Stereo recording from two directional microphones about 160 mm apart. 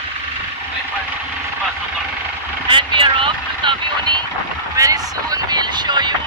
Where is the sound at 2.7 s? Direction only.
30° right (ahead or behind).